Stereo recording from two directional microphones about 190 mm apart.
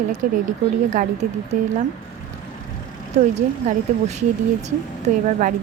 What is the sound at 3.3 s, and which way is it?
Speech, 35° right (ahead or behind).